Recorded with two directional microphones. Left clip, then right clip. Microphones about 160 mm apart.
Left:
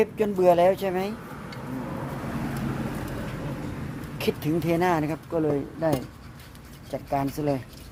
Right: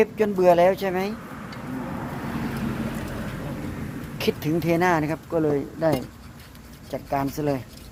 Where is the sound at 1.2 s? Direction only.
90° left.